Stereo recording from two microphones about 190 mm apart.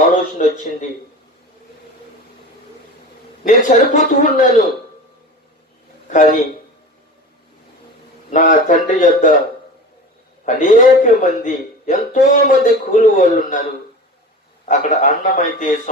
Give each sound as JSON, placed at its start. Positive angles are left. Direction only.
{"t": 0.1, "sound": "a man's voice", "side_deg": 45}
{"t": 3.4, "sound": "speech", "side_deg": 45}
{"t": 6.1, "sound": "speech", "side_deg": 45}
{"t": 8.3, "sound": "speech", "side_deg": 45}
{"t": 10.4, "sound": "speech", "side_deg": 45}
{"t": 14.7, "sound": "speech", "side_deg": 40}